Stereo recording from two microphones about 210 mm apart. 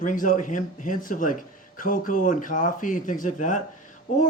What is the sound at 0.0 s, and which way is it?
Speech, 40° left (ahead or behind).